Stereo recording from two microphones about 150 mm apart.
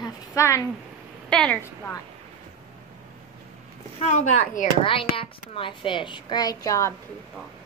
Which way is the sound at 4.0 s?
50° left (ahead or behind).